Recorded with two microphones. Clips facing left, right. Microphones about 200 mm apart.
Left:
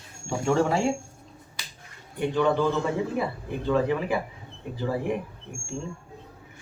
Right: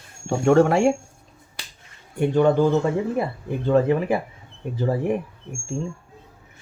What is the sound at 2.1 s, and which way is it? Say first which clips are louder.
Speech: right 5 dB; 45° right (ahead or behind).